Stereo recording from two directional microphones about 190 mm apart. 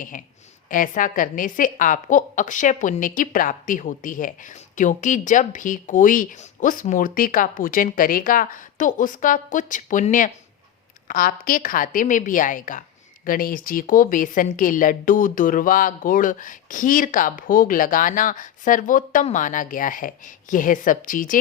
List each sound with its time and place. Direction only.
0.1 s a woman's voice: 45° left (ahead or behind)